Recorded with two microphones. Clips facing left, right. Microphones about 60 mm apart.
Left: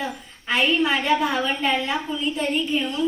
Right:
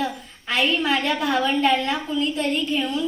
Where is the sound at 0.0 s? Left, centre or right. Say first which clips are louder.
Right 3 dB; centre.